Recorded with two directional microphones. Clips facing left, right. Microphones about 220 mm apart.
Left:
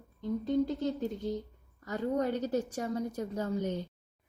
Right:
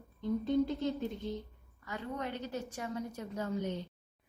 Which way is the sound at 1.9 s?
40° left (ahead or behind).